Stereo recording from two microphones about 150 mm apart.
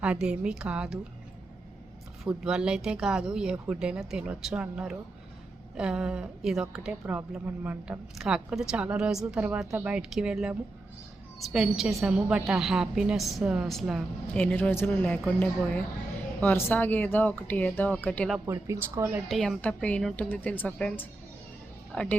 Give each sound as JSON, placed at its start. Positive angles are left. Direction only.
{"t": 0.0, "sound": "a woman's voice", "side_deg": -5}
{"t": 2.2, "sound": "a woman's voice", "side_deg": -5}
{"t": 14.3, "sound": "speech", "side_deg": 10}
{"t": 18.3, "sound": "speech", "side_deg": -20}
{"t": 19.3, "sound": "a woman's voice", "side_deg": 5}